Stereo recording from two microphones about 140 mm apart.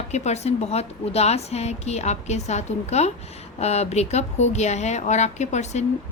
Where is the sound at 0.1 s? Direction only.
50° left (ahead or behind).